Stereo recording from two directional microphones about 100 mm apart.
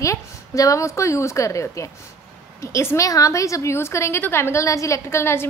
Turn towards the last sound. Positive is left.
turn(degrees=25)  # may be behind; listen again after turning